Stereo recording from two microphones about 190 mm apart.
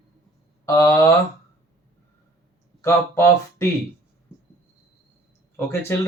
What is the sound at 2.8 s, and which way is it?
Speech, 15° left (ahead or behind).